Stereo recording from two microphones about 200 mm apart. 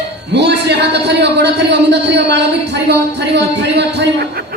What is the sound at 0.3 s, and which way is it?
A man's voice, 55° right (ahead or behind).